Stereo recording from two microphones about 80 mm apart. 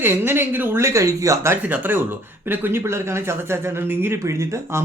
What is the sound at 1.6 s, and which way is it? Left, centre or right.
Speech, right.